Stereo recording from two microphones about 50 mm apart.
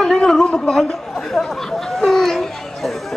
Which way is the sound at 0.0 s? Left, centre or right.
Centre.